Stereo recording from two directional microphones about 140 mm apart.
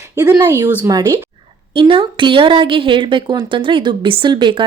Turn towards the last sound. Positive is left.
turn(degrees=-35)  # may be behind; listen again after turning